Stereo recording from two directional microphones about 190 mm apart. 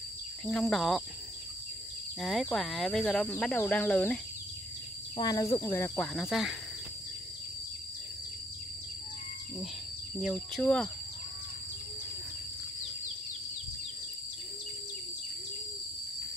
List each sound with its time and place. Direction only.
0.5 s speech: centre (ahead or behind)
2.1 s speech: centre (ahead or behind)
5.1 s speech: 20° left (ahead or behind)
6.1 s speech: centre (ahead or behind)
10.3 s speech: 5° left (ahead or behind)